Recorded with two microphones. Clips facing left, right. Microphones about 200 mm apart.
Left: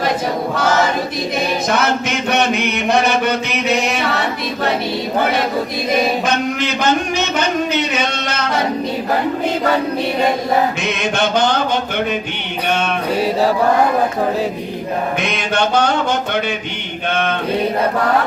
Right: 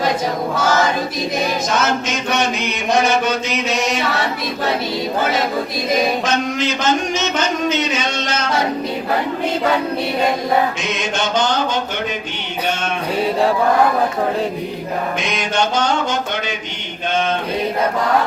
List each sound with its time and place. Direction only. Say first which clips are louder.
1.7 s a man's voice: left 1 dB; 60° left (ahead or behind)
6.2 s a man's voice: left 1 dB; 60° left (ahead or behind)
10.8 s a man's voice: left 3 dB; 60° left (ahead or behind)
15.4 s a man's voice: left 2 dB; 60° left (ahead or behind)